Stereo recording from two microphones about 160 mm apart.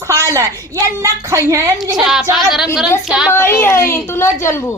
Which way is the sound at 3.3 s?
15° left (ahead or behind).